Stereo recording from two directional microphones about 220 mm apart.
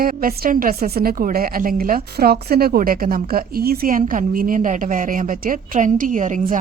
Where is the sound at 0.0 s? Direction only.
40° right (ahead or behind).